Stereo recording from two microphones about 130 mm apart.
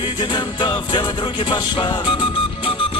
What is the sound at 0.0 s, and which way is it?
Music, 40° left (ahead or behind).